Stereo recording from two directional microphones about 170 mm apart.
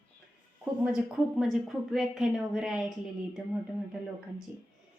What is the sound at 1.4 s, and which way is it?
A woman's voice, centre (ahead or behind).